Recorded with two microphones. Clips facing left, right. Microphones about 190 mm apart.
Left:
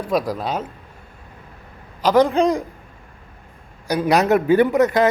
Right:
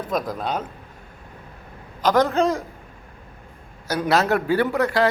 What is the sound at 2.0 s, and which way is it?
Speech, 10° left (ahead or behind).